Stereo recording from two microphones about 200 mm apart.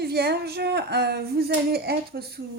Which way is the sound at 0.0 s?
50° right (ahead or behind).